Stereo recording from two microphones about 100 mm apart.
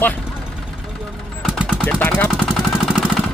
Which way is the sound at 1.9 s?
20° left (ahead or behind).